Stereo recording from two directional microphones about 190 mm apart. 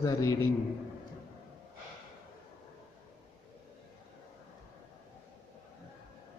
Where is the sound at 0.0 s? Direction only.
15° left (ahead or behind).